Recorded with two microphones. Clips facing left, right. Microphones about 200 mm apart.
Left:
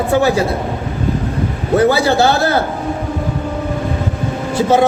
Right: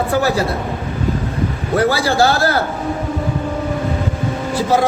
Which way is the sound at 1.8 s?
25° left (ahead or behind).